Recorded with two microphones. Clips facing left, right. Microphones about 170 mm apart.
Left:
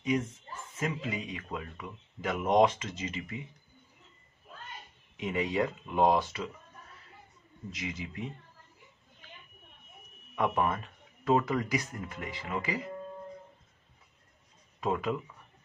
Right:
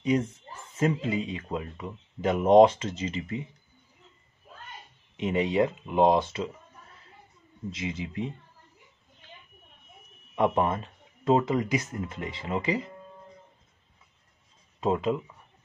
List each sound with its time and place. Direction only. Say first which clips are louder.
0.0 s speech: right 5 dB; 30° right (ahead or behind)
5.1 s speech: right 5 dB; 25° right (ahead or behind)
7.7 s speech: right 5 dB; 25° right (ahead or behind)
10.3 s speech: right 4 dB; 25° right (ahead or behind)
14.8 s speech: right 5 dB; 25° right (ahead or behind)